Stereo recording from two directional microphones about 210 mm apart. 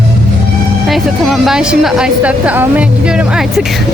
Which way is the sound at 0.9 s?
Centre (ahead or behind).